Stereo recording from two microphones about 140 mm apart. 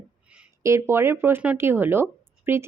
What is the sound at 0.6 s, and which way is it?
A woman's voice, 20° right (ahead or behind).